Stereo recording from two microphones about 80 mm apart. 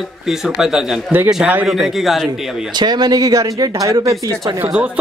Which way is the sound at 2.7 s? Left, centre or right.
Right.